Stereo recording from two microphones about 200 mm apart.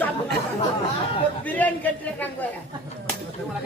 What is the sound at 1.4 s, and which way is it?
Speech, 10° left (ahead or behind).